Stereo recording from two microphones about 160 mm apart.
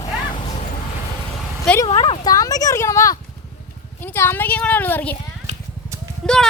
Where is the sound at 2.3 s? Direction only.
20° left (ahead or behind).